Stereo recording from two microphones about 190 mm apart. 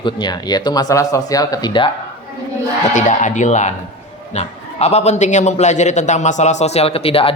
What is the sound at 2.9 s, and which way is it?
Speech, 40° left (ahead or behind).